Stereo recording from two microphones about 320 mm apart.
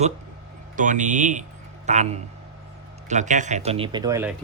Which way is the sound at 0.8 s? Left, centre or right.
Right.